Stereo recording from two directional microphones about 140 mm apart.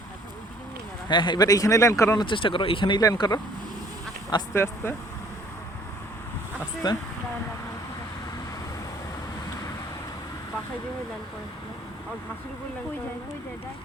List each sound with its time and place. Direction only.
1.0 s speech: 35° left (ahead or behind)
2.2 s speech: 35° left (ahead or behind)
4.5 s speech: 20° left (ahead or behind)
6.8 s speech: 30° left (ahead or behind)